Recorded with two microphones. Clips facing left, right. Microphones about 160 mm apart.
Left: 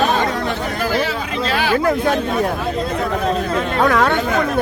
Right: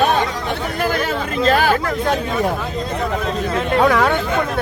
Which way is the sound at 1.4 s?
45° right (ahead or behind).